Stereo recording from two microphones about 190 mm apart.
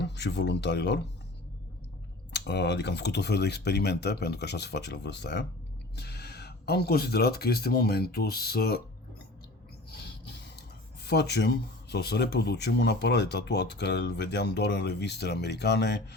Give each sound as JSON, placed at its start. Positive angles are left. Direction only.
{"t": 0.0, "sound": "speech", "side_deg": 60}
{"t": 2.3, "sound": "speech", "side_deg": 60}
{"t": 9.9, "sound": "a sound", "side_deg": 60}
{"t": 11.0, "sound": "speech", "side_deg": 60}